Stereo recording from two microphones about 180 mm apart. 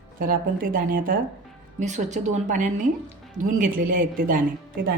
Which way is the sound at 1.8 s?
40° right (ahead or behind).